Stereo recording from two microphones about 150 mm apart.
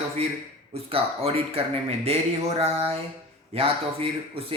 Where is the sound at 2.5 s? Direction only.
40° right (ahead or behind).